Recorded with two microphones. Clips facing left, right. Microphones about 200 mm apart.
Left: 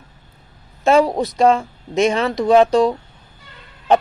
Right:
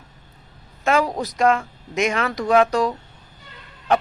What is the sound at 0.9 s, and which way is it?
Speech, 30° left (ahead or behind).